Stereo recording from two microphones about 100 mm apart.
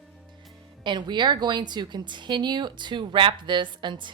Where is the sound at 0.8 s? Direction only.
50° right (ahead or behind).